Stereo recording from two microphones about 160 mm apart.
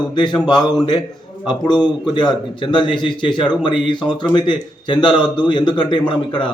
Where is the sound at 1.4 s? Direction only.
25° left (ahead or behind).